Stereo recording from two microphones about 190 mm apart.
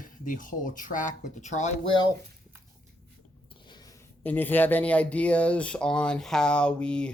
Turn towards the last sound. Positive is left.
turn(degrees=5)  # may be behind; listen again after turning